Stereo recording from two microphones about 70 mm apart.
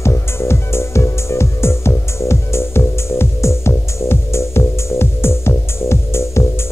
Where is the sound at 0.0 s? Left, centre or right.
Left.